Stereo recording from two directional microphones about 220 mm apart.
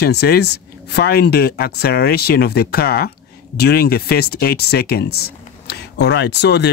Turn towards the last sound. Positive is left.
turn(degrees=50)  # may be behind; listen again after turning